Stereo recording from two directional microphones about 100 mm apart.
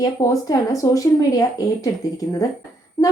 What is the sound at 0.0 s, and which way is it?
A woman's voice, 40° left (ahead or behind).